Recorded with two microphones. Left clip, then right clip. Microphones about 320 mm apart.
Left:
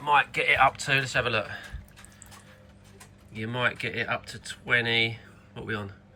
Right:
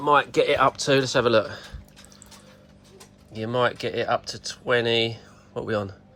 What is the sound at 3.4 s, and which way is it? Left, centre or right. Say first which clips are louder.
Speech: right 5 dB; centre.